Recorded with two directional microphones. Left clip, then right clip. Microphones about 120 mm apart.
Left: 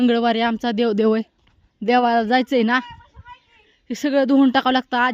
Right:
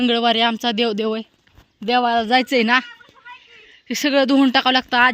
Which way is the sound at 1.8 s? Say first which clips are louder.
Left 1 dB; 75° left (ahead or behind).